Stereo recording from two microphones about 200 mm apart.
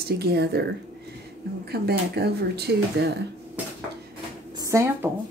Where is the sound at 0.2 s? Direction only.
55° right (ahead or behind).